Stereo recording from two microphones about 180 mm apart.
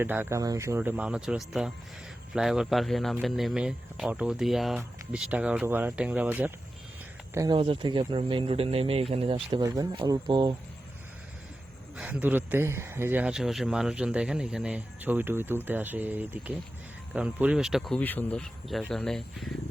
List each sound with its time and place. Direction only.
0.0 s speech: 10° right (ahead or behind)
7.3 s speech: 20° right (ahead or behind)
11.9 s a sound: 5° right (ahead or behind)
12.5 s speech: 15° right (ahead or behind); by 19.5 s centre (ahead or behind)